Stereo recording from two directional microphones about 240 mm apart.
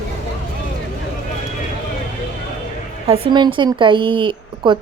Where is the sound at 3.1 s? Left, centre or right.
Centre.